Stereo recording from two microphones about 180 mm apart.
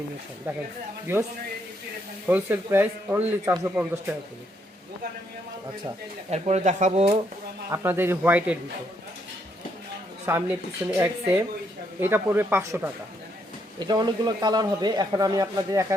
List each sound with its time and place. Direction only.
0.5 s speech: 10° right (ahead or behind)
2.2 s speech: 10° right (ahead or behind)
6.3 s speech: 40° right (ahead or behind)
7.7 s speech: 15° right (ahead or behind)
10.2 s speech: 15° right (ahead or behind)
13.7 s a man's voice: 25° right (ahead or behind)